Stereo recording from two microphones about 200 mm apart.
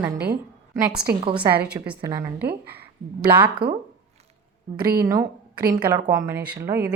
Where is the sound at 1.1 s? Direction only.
10° right (ahead or behind).